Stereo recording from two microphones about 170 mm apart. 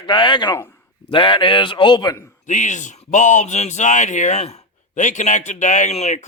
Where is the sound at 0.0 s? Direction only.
25° left (ahead or behind).